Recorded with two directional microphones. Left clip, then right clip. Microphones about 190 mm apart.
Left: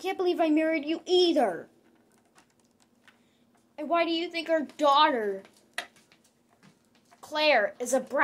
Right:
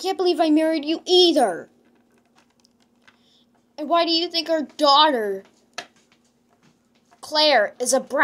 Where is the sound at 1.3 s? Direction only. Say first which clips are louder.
Right 6 dB; 30° right (ahead or behind).